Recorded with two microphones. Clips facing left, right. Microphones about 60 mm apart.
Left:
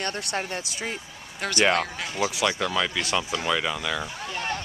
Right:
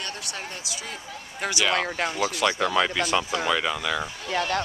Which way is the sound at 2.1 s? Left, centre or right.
Centre.